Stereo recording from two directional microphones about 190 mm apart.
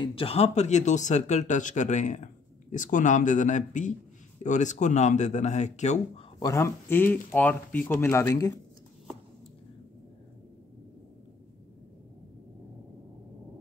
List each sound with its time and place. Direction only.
0.0 s speech: 30° left (ahead or behind)
6.4 s speech: 15° left (ahead or behind)